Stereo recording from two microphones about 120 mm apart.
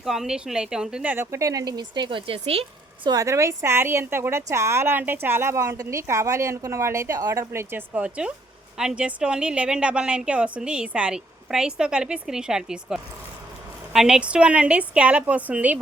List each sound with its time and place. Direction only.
0.0 s a woman's voice: 5° right (ahead or behind); by 3.1 s 55° right (ahead or behind)
3.1 s a woman's voice: 25° right (ahead or behind)